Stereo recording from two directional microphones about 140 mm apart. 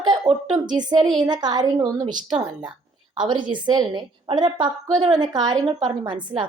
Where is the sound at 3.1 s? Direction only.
35° right (ahead or behind).